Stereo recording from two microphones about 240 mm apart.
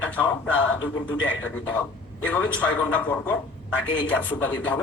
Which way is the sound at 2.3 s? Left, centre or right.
Centre.